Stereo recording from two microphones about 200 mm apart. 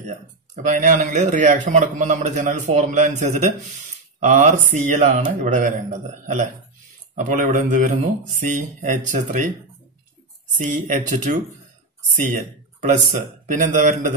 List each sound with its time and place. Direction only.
0.7 s speech: 40° right (ahead or behind)
10.6 s speech: 40° right (ahead or behind)
13.5 s speech: 40° right (ahead or behind)